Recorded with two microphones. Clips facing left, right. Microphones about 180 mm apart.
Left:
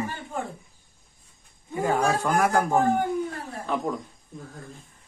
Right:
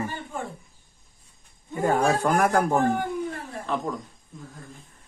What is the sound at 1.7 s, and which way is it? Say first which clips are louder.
A man's voice: right 1 dB; 45° right (ahead or behind).